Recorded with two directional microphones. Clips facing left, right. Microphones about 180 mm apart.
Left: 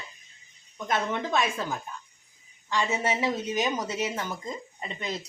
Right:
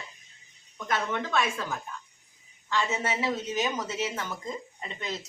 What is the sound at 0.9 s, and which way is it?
A woman's voice, 20° left (ahead or behind).